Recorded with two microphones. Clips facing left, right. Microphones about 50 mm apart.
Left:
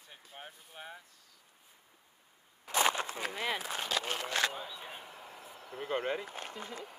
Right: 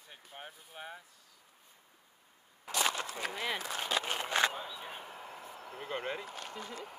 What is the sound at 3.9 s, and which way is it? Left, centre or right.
Speech, centre.